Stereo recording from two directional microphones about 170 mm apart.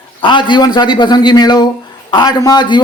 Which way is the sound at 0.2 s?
30° left (ahead or behind).